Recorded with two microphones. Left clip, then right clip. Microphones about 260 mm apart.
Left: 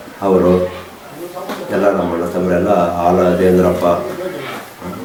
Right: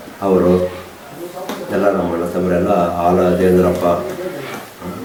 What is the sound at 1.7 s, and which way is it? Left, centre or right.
A man's voice, centre.